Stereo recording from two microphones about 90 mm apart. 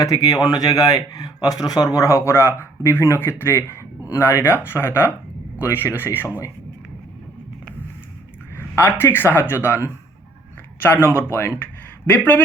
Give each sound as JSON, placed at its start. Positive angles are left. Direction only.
{"t": 0.0, "sound": "speech", "side_deg": 45}
{"t": 8.5, "sound": "speech", "side_deg": 25}